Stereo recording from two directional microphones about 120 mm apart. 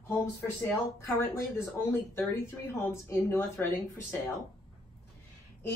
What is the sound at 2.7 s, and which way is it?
Speech, 20° left (ahead or behind).